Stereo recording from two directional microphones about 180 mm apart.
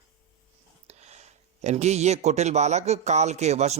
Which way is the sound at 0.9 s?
35° right (ahead or behind).